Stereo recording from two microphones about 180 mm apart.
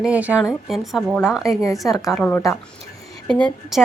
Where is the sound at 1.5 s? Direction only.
20° left (ahead or behind).